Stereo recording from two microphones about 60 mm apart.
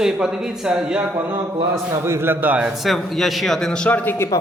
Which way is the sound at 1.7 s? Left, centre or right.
Right.